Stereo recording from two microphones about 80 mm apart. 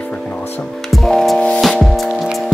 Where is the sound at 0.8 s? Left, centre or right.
Centre.